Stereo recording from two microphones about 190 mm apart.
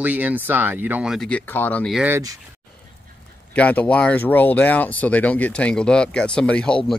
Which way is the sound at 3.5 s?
10° left (ahead or behind).